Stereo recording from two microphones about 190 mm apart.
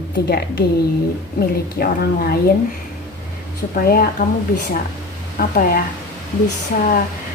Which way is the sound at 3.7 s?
50° left (ahead or behind).